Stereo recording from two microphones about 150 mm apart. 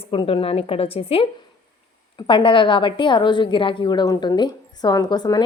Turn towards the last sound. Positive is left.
turn(degrees=25)  # may be behind; listen again after turning